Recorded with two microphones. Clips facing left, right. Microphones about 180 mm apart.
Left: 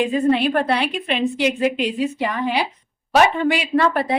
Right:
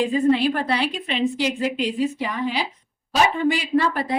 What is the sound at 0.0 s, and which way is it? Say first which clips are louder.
Speech: left 1 dB; 65° left (ahead or behind).